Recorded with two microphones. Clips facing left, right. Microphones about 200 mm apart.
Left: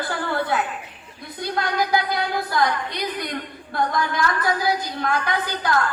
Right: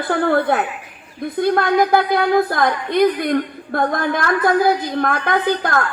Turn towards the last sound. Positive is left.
turn(degrees=-55)  # may be behind; listen again after turning